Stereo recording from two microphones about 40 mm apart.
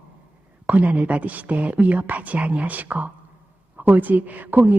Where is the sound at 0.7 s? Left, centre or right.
Right.